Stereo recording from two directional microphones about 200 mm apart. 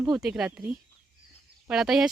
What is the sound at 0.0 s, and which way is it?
Speech, 5° right (ahead or behind).